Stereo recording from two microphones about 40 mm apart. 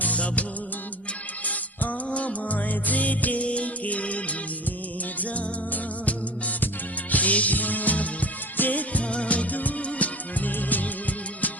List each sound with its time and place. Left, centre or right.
0.0 s music: left
1.5 s music: left